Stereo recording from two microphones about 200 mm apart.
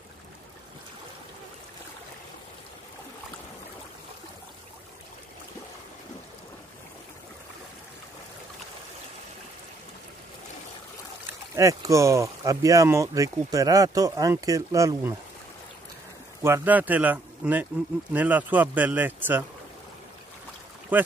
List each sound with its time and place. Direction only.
11.5 s speech: 15° right (ahead or behind)
16.4 s speech: 10° right (ahead or behind)
20.9 s speech: 10° right (ahead or behind)